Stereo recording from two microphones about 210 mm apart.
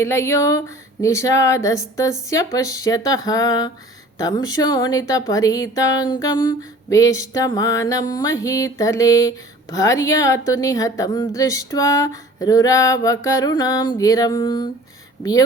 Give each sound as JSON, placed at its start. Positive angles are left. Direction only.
{"t": 0.0, "sound": "speech", "side_deg": 15}